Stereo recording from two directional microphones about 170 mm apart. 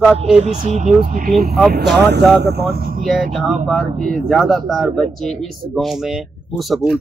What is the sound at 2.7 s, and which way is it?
Speech, 60° right (ahead or behind).